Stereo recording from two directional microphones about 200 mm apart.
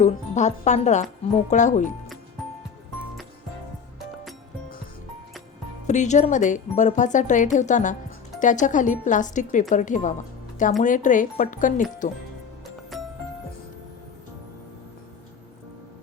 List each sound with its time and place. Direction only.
0.0 s speech: 35° left (ahead or behind)
5.9 s speech: 35° left (ahead or behind)
12.9 s music: centre (ahead or behind)